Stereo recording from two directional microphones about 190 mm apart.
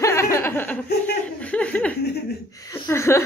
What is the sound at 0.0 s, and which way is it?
Laughter, 15° left (ahead or behind).